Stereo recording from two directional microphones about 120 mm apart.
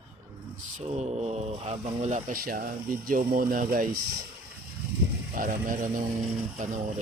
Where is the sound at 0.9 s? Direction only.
65° right (ahead or behind); by 2.3 s 85° right.